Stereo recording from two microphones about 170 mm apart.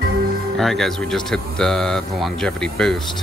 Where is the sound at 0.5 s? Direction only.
Centre (ahead or behind).